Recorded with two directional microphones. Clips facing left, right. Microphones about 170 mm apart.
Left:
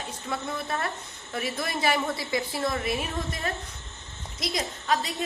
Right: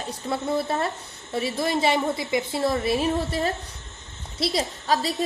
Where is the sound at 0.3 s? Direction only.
30° right (ahead or behind).